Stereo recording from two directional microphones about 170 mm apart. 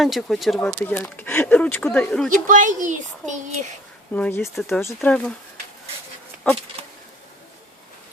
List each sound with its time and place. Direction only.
0.0 s speech: centre (ahead or behind)
0.7 s speech: 10° left (ahead or behind)
2.3 s speech: 50° right (ahead or behind)
4.1 s speech: 10° left (ahead or behind)